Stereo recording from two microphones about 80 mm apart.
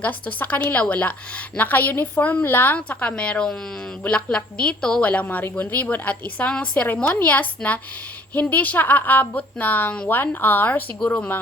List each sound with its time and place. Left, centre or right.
0.0 s a woman's voice: left